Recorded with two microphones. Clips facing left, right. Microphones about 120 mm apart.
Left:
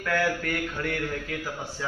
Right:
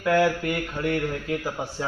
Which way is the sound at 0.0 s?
20° right (ahead or behind).